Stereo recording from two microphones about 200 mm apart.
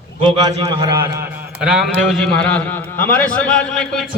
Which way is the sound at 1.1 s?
10° right (ahead or behind).